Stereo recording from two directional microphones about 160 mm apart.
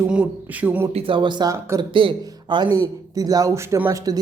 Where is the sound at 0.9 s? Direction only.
35° right (ahead or behind); by 1.9 s 15° right (ahead or behind).